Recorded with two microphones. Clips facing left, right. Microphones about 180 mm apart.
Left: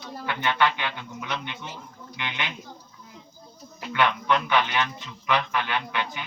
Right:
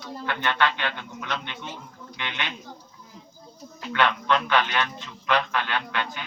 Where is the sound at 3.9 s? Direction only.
15° left (ahead or behind).